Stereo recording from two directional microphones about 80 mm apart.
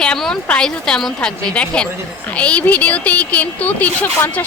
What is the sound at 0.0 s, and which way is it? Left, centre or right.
A woman's voice, centre.